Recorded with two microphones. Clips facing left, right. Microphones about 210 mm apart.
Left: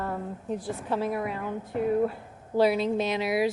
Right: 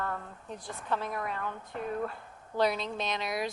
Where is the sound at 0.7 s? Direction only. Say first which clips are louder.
Left 3 dB; 10° left (ahead or behind).